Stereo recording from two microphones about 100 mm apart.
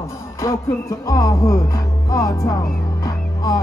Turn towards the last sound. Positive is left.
turn(degrees=40)  # may be behind; listen again after turning